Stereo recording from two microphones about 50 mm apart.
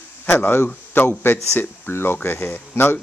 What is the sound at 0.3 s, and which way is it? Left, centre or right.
Speech, left.